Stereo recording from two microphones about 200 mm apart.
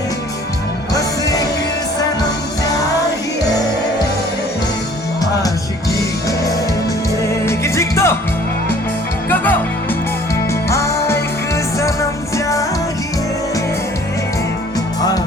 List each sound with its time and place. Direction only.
0.9 s music: 15° left (ahead or behind)
7.4 s music: 15° left (ahead or behind)
9.3 s music: 10° left (ahead or behind)
10.7 s music: 15° left (ahead or behind)